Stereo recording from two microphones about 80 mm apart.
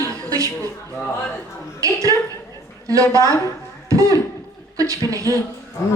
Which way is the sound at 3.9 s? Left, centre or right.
Right.